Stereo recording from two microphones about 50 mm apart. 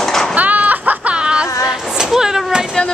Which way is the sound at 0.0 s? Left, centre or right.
Centre.